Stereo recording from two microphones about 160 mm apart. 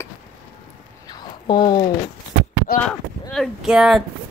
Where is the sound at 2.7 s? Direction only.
70° left (ahead or behind).